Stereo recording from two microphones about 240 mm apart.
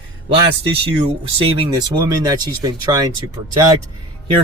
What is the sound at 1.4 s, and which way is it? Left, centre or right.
Speech, centre.